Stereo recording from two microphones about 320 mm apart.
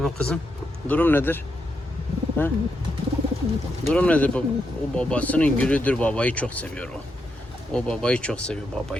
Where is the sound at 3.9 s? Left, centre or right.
Centre.